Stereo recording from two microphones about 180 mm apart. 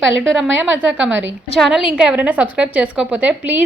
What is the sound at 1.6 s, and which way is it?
A woman's voice, centre (ahead or behind).